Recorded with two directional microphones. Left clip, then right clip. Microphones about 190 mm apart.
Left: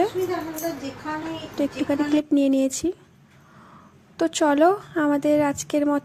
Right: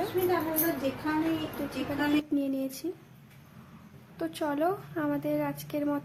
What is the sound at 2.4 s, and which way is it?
Speech, 40° left (ahead or behind).